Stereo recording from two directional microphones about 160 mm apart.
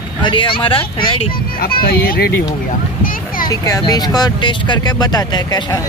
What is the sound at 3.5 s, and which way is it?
Speech, 20° left (ahead or behind).